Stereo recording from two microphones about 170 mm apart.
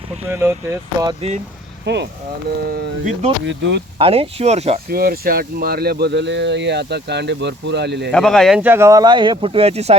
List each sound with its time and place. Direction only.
0.3 s speech: 15° right (ahead or behind)
1.8 s speech: 90° right
2.6 s speech: 65° right (ahead or behind)
3.4 s speech: 90° right
3.9 s speech: 35° right (ahead or behind)
4.9 s speech: 60° right (ahead or behind); by 8.1 s 90° right
8.1 s speech: 5° left (ahead or behind)
8.6 s speech: 15° right (ahead or behind); by 10.0 s 40° right (ahead or behind)